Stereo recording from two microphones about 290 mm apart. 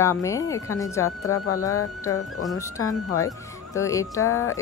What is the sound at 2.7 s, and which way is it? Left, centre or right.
Speech, centre.